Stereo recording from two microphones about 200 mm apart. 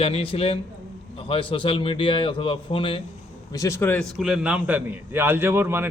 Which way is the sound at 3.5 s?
15° left (ahead or behind).